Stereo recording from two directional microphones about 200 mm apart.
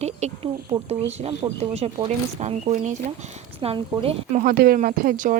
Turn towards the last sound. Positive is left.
turn(degrees=-40)  # may be behind; listen again after turning